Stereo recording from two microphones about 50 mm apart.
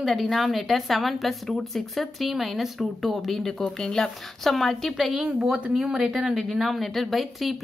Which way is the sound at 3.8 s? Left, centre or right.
Centre.